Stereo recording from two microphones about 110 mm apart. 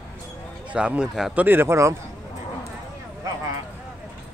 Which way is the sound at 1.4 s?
20° right (ahead or behind).